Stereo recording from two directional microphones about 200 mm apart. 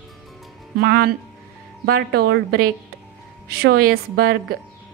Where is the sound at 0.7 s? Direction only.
50° right (ahead or behind).